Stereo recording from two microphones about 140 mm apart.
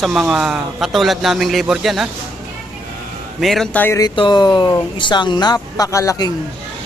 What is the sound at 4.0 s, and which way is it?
Speech, 30° left (ahead or behind).